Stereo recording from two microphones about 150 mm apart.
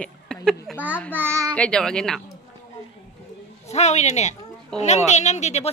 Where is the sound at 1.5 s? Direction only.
5° left (ahead or behind).